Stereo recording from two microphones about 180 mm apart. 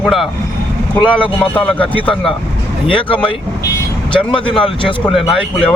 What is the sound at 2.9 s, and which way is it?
Speech, 5° left (ahead or behind).